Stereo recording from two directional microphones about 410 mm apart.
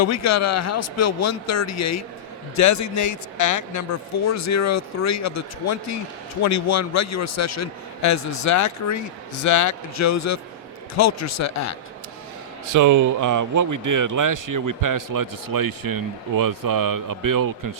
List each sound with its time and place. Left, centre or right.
0.0 s a man's voice: left
12.6 s speech: right